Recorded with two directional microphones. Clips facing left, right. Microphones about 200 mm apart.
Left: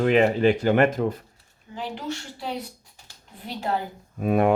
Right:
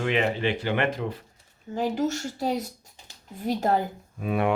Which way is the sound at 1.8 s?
45° right (ahead or behind).